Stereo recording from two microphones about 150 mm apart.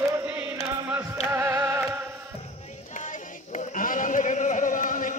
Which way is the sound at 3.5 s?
65° left (ahead or behind).